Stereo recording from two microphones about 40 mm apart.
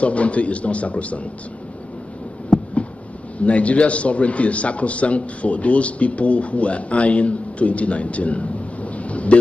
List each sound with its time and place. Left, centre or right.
0.0 s a man's voice: left
3.3 s a man's voice: left
8.9 s a sound: left